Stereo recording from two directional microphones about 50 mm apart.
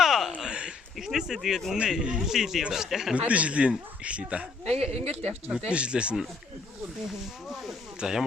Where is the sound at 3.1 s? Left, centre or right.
Right.